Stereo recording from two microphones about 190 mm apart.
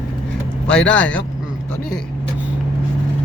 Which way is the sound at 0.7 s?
5° left (ahead or behind).